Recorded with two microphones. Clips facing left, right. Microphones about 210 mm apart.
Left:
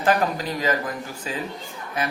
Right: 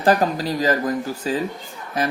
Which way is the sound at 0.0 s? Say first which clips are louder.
Right 3 dB; 35° right (ahead or behind).